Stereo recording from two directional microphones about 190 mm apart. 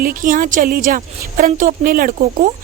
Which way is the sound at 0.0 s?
45° right (ahead or behind).